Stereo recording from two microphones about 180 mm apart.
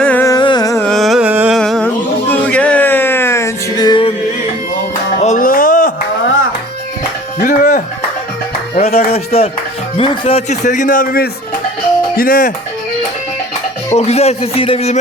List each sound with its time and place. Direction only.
0.0 s carnatic music: 10° left (ahead or behind)
0.3 s carnatic music: 25° left (ahead or behind)
0.9 s carnatic music: centre (ahead or behind)
1.5 s a sound: 5° left (ahead or behind)
2.3 s music: 5° left (ahead or behind); by 4.1 s 25° left (ahead or behind)
5.2 s music: 45° left (ahead or behind)
7.3 s music: 45° left (ahead or behind)
8.7 s music: 35° left (ahead or behind)
10.0 s a man's voice: 30° left (ahead or behind); by 12.5 s 50° left (ahead or behind)
13.9 s speech: 35° left (ahead or behind)